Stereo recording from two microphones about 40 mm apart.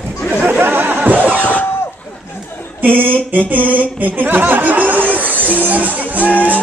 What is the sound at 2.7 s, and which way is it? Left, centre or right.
Speech, right.